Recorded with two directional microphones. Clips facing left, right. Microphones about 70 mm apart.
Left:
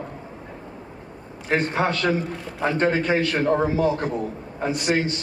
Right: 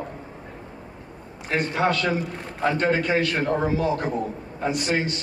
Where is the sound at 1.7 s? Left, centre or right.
Left.